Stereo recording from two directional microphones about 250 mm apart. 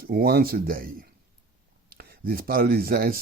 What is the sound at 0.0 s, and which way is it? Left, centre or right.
Speech, right.